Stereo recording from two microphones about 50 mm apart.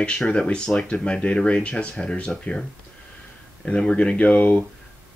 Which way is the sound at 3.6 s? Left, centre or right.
Centre.